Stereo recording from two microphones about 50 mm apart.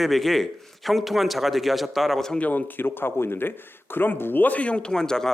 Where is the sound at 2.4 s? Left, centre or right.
Left.